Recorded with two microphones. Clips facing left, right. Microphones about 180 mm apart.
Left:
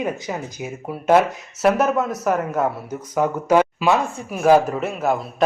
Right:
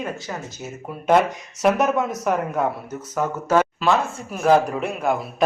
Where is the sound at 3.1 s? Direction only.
15° left (ahead or behind).